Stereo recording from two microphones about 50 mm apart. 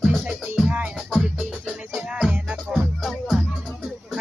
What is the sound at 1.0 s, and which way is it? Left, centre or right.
Music, centre.